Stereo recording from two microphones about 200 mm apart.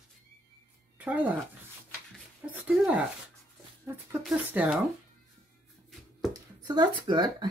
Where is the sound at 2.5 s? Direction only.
5° right (ahead or behind).